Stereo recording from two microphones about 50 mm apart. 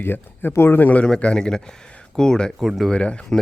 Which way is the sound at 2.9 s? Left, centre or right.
Left.